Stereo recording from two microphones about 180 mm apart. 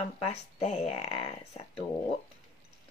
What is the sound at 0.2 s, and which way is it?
Speech, 35° left (ahead or behind).